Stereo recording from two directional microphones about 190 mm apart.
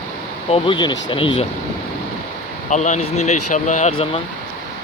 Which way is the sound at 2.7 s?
40° left (ahead or behind).